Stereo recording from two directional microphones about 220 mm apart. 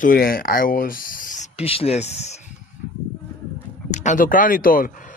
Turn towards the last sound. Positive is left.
turn(degrees=40)  # may be behind; listen again after turning